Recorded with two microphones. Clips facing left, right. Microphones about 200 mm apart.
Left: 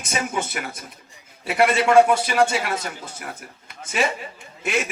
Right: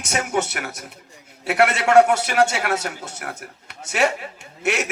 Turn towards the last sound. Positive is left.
turn(degrees=-70)  # may be behind; listen again after turning